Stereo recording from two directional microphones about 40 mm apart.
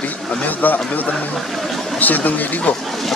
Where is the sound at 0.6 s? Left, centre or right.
Left.